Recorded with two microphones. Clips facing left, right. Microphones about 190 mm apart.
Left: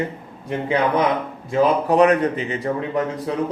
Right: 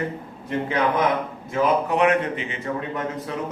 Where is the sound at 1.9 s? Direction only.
35° left (ahead or behind).